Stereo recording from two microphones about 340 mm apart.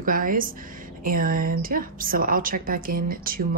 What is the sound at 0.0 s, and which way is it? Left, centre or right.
Speech, right.